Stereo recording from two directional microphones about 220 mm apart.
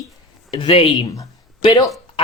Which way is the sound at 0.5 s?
25° left (ahead or behind).